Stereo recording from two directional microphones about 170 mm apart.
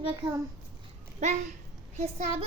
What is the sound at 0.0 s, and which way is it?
Speech, 30° right (ahead or behind).